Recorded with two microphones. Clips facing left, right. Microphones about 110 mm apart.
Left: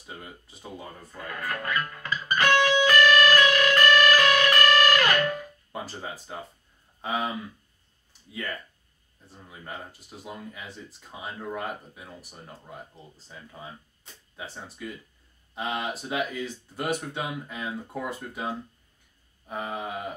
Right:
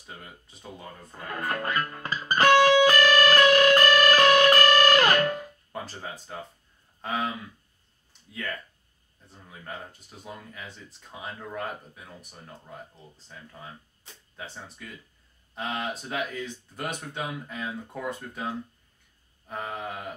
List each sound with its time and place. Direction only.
0.0 s speech: 5° left (ahead or behind)
1.1 s music: 30° right (ahead or behind)
5.7 s speech: 5° left (ahead or behind)
9.3 s speech: 5° left (ahead or behind)